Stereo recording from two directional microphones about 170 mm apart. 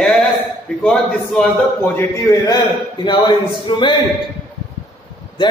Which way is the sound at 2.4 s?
25° left (ahead or behind).